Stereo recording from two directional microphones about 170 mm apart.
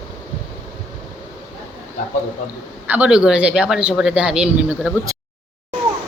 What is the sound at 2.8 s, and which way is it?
A woman's voice, 10° right (ahead or behind).